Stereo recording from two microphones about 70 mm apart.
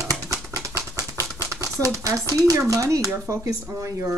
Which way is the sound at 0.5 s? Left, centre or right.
Right.